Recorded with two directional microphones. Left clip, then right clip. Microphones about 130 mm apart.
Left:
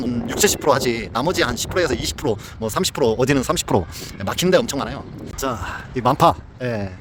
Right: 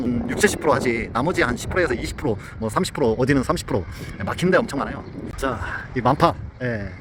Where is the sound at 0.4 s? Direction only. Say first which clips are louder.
Left 2 dB; 35° left (ahead or behind).